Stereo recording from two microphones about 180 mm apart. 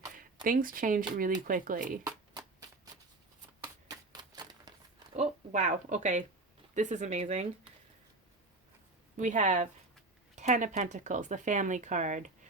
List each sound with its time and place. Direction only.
0.4 s speech: 50° right (ahead or behind)
2.0 s shuffling cards: 20° right (ahead or behind)
3.6 s a sound: 20° right (ahead or behind)
5.5 s speech: 45° right (ahead or behind)
9.1 s speech: 45° right (ahead or behind)